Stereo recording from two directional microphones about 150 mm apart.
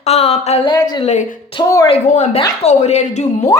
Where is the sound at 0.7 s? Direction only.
25° left (ahead or behind).